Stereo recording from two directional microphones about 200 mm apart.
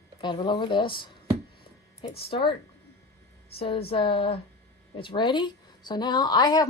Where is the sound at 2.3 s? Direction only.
25° left (ahead or behind).